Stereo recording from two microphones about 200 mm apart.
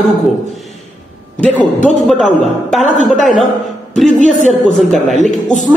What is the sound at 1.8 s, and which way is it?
A man's voice, centre (ahead or behind).